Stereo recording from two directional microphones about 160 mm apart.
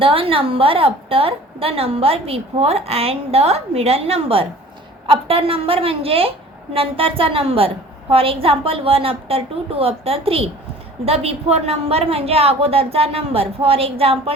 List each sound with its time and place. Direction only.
0.0 s a woman's voice: 35° right (ahead or behind)